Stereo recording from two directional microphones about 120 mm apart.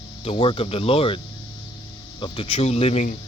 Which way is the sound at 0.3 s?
45° left (ahead or behind).